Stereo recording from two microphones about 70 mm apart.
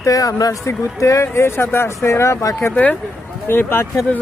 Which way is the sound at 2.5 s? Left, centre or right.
Left.